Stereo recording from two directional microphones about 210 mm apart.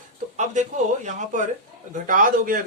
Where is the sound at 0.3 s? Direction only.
35° right (ahead or behind).